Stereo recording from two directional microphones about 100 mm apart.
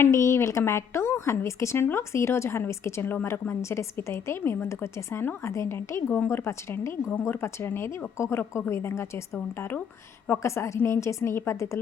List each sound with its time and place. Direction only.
0.0 s a woman's voice: 30° left (ahead or behind)